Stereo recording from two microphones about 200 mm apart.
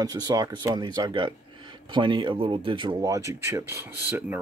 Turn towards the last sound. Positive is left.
turn(degrees=-10)  # may be behind; listen again after turning